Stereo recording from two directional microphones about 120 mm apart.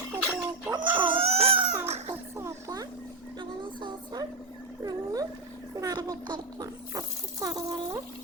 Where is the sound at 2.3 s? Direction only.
25° right (ahead or behind).